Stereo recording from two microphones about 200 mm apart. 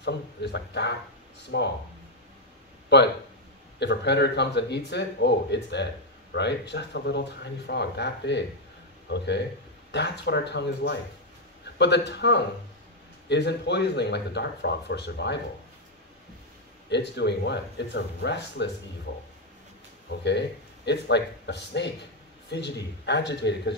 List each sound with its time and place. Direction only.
0.0 s speech: 60° left (ahead or behind)
2.9 s speech: 60° left (ahead or behind)
16.9 s speech: 60° left (ahead or behind)
20.2 s speech: 60° left (ahead or behind)